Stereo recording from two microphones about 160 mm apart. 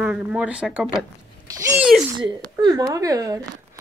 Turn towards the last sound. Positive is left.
turn(degrees=-20)  # may be behind; listen again after turning